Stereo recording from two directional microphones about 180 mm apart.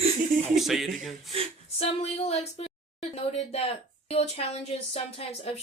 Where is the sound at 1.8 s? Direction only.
35° left (ahead or behind).